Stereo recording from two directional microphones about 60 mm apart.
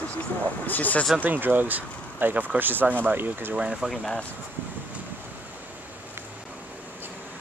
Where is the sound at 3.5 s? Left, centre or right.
Centre.